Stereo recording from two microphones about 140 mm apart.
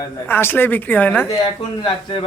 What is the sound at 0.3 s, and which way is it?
Speech, 15° left (ahead or behind).